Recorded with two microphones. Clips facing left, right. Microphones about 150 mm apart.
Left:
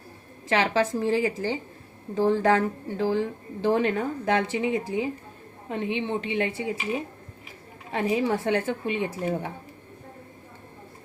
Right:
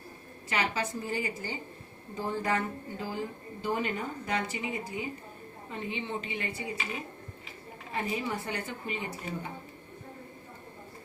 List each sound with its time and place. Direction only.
0.4 s a woman's voice: 90° left
5.6 s a woman's voice: 75° left (ahead or behind)
7.9 s a woman's voice: 90° left; by 9.5 s 70° left (ahead or behind)